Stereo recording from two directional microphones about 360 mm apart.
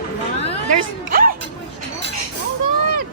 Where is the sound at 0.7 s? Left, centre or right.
Right.